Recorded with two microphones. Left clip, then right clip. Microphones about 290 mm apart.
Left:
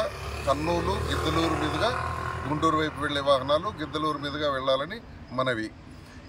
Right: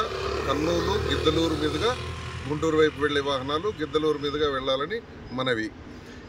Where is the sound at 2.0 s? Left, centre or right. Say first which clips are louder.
Left 6 dB; centre.